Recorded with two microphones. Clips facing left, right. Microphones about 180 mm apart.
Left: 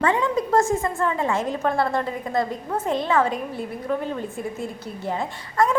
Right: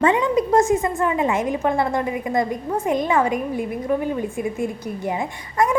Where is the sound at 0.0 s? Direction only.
20° right (ahead or behind).